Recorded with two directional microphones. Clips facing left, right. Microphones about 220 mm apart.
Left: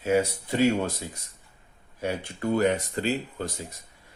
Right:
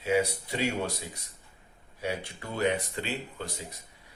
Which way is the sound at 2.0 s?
50° left (ahead or behind).